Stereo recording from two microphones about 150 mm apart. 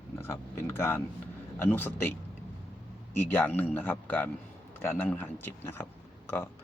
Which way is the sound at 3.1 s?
10° left (ahead or behind).